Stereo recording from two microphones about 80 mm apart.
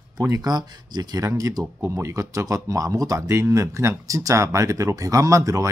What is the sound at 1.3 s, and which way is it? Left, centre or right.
Speech, right.